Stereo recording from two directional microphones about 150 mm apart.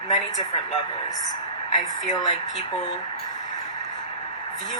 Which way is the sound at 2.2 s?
35° left (ahead or behind).